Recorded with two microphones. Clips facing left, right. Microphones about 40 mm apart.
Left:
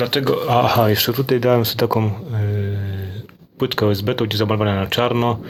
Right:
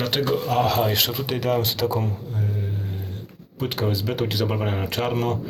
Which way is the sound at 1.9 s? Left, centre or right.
Left.